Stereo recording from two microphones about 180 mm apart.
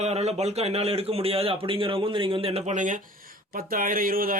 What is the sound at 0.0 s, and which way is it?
A man's voice, 35° right (ahead or behind).